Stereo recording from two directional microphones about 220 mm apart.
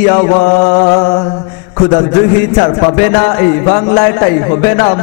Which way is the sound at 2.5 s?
20° left (ahead or behind).